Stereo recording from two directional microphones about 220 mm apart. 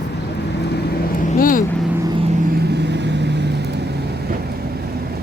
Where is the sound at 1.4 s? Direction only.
40° left (ahead or behind).